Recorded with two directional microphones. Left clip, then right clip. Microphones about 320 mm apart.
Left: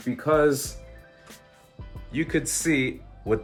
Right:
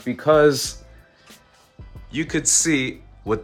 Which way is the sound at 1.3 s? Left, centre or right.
Centre.